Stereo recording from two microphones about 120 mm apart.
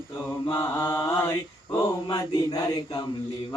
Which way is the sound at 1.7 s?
30° left (ahead or behind).